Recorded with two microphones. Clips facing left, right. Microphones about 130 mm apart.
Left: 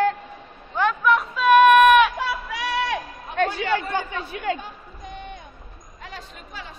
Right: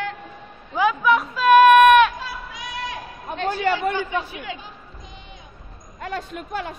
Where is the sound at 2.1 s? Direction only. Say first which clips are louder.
Left 6 dB; 70° left (ahead or behind).